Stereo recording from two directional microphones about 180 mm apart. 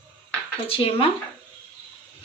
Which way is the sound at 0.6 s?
30° left (ahead or behind).